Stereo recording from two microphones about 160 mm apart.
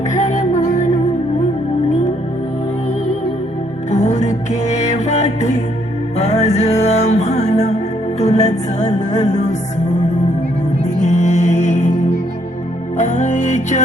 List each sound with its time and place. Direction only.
0.1 s music: 50° left (ahead or behind)
3.9 s music: 45° left (ahead or behind)
10.8 s music: 45° left (ahead or behind)